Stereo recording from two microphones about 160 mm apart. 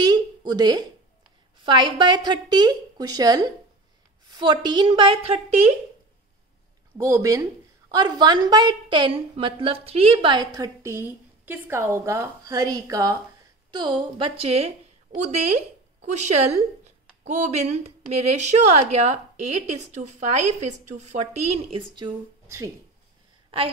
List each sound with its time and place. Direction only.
0.0 s a sound: 25° right (ahead or behind)
1.6 s a woman's voice: 30° right (ahead or behind)
4.6 s a woman's voice: 30° right (ahead or behind)
7.0 s a woman's voice: 20° right (ahead or behind); by 21.5 s 45° right (ahead or behind)
21.7 s a woman's voice: 30° right (ahead or behind)